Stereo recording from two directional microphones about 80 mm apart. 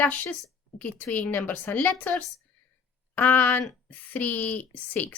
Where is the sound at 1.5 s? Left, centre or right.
Left.